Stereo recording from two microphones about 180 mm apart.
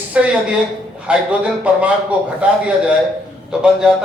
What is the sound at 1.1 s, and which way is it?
A man's voice, 5° right (ahead or behind).